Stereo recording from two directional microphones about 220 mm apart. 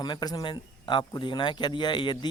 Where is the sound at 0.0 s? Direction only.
20° left (ahead or behind).